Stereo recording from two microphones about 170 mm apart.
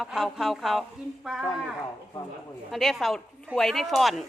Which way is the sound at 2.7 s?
Centre (ahead or behind).